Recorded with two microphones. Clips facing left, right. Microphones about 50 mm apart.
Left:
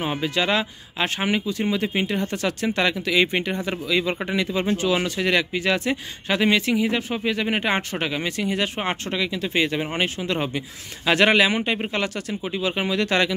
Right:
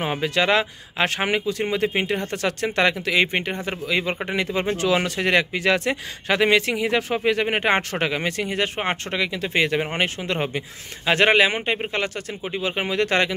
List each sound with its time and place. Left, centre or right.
0.0 s speech: right
4.8 s speech: right
7.2 s speech: right
11.1 s speech: right